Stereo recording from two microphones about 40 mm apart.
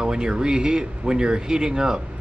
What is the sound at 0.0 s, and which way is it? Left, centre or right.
Speech, centre.